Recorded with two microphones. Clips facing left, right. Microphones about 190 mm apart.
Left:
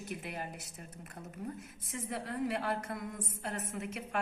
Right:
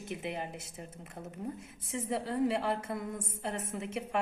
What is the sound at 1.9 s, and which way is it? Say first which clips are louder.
A woman's voice: right 5 dB; 30° right (ahead or behind).